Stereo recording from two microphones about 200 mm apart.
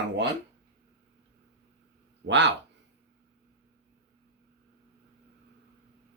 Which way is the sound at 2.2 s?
65° right (ahead or behind).